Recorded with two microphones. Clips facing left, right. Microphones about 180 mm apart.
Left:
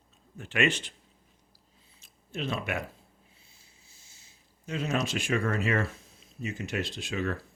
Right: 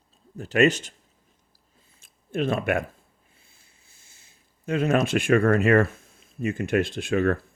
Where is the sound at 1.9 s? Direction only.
50° right (ahead or behind).